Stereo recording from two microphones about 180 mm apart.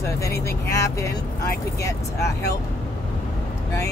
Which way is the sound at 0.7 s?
15° left (ahead or behind).